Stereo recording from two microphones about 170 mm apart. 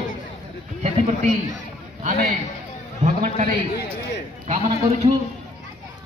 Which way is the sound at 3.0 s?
45° right (ahead or behind).